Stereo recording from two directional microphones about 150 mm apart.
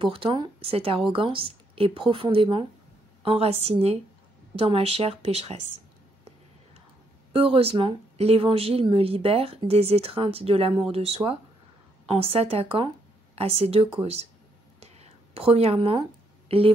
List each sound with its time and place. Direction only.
0.0 s speech: 35° right (ahead or behind)
7.3 s speech: 40° right (ahead or behind)
14.8 s a sound: 40° right (ahead or behind)